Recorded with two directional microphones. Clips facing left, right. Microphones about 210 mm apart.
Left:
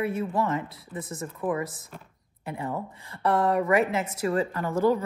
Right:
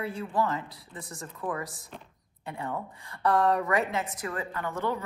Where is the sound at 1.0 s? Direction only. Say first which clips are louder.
Left 5 dB; centre (ahead or behind).